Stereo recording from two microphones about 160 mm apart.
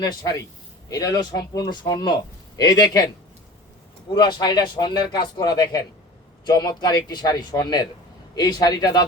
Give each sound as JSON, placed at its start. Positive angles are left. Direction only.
{"t": 0.0, "sound": "a man's voice", "side_deg": 25}
{"t": 4.1, "sound": "a man's voice", "side_deg": 30}